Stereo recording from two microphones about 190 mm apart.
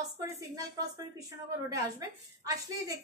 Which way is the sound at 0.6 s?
20° right (ahead or behind).